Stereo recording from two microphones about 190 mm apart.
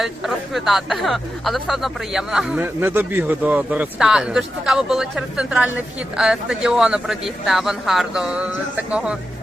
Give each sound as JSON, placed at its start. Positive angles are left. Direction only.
{"t": 0.0, "sound": "speech", "side_deg": 0}